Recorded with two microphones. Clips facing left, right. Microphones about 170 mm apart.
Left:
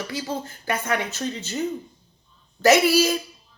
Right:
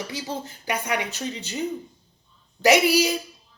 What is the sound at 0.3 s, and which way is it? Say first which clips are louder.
Speech: left 1 dB; 15° right (ahead or behind).